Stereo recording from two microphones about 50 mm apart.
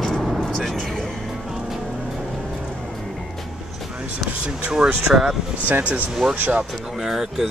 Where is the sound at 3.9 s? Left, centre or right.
Right.